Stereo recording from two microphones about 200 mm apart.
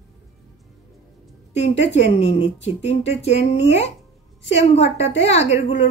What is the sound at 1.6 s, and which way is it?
Speech, 30° left (ahead or behind).